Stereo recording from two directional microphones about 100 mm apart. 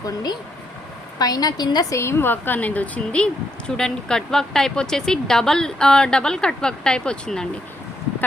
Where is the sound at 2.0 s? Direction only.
25° left (ahead or behind); by 7.4 s 10° left (ahead or behind).